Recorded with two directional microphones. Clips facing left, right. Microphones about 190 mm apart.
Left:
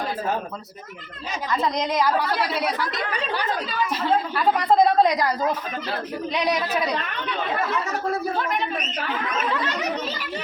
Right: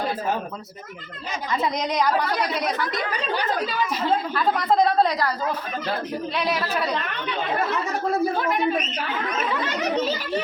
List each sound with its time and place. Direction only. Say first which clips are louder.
1.6 s a woman's voice: left 1 dB; centre (ahead or behind)
4.4 s a woman's voice: left 3 dB; 10° left (ahead or behind)